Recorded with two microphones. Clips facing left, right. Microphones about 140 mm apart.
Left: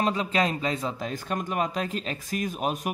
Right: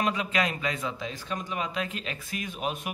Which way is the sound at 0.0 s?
35° left (ahead or behind).